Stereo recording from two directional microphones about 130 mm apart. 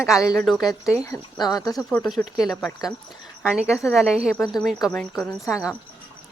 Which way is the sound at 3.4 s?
5° right (ahead or behind).